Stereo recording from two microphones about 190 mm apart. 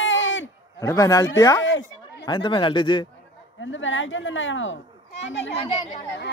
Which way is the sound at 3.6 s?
80° left.